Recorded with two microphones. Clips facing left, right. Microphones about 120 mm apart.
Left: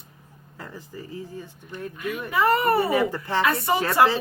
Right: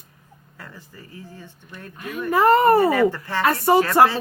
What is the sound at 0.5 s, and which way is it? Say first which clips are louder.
Speech: left 4 dB; 20° left (ahead or behind).